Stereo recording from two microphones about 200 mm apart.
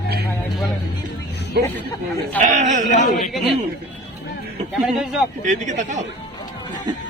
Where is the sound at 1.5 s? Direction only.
55° right (ahead or behind).